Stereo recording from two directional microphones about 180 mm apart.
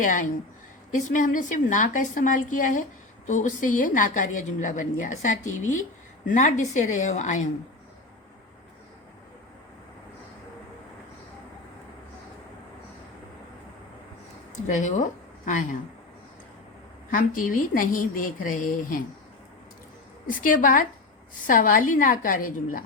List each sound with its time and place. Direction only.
0.0 s a woman's voice: 45° left (ahead or behind)
14.5 s speech: 45° left (ahead or behind)
17.1 s a woman's voice: 50° left (ahead or behind)
20.2 s a woman's voice: 50° left (ahead or behind)